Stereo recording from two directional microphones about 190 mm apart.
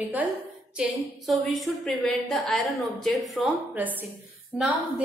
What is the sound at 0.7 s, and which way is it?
A woman's voice, centre (ahead or behind).